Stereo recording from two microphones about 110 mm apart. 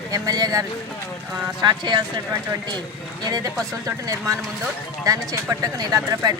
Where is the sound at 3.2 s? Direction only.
35° right (ahead or behind).